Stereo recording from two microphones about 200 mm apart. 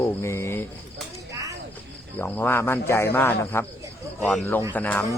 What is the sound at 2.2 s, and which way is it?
Speech, 10° left (ahead or behind).